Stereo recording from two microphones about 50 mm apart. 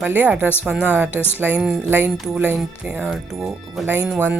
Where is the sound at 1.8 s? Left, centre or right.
Right.